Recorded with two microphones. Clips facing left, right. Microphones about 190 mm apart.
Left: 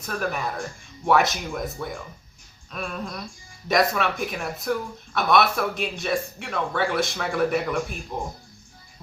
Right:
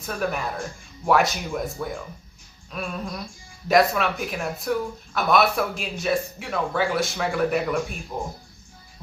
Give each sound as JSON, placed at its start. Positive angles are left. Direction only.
{"t": 0.0, "sound": "speech", "side_deg": 0}